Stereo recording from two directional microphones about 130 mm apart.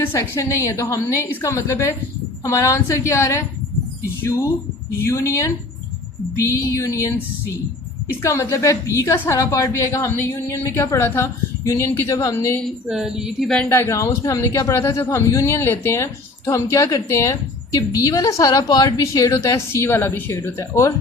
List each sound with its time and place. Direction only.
0.1 s a woman's voice: 20° left (ahead or behind)
12.9 s a woman's voice: 5° right (ahead or behind); by 20.9 s 20° left (ahead or behind)